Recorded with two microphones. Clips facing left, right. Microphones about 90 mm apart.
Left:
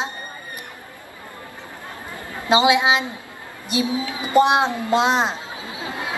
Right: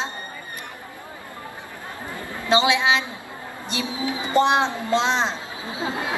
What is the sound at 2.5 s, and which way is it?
Speech, 15° left (ahead or behind).